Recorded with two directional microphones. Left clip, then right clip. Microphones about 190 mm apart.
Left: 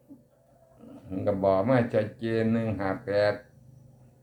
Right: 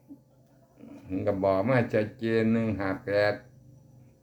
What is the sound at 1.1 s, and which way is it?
Speech, 30° right (ahead or behind).